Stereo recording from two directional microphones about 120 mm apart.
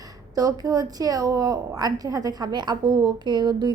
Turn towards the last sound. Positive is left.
turn(degrees=-35)  # may be behind; listen again after turning